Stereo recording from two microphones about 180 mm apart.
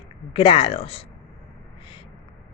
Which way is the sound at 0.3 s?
30° left (ahead or behind).